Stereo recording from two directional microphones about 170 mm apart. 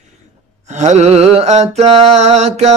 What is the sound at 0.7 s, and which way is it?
Mantra, 40° right (ahead or behind).